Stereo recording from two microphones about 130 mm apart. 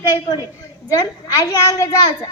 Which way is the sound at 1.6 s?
25° left (ahead or behind).